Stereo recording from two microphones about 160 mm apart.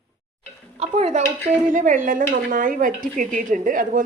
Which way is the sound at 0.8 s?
40° right (ahead or behind).